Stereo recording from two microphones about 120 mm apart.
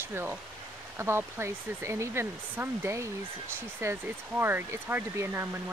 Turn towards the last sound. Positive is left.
turn(degrees=-20)  # may be behind; listen again after turning